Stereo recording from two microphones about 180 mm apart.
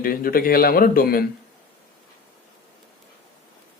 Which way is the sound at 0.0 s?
55° left (ahead or behind).